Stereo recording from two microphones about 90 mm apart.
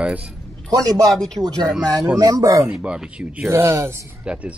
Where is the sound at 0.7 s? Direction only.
45° right (ahead or behind).